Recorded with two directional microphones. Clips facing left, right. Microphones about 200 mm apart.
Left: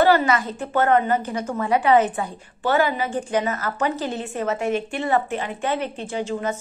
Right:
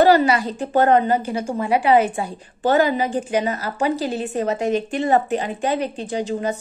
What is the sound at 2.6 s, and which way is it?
A woman's voice, 40° right (ahead or behind).